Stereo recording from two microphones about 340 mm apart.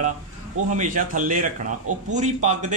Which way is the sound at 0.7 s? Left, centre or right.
Right.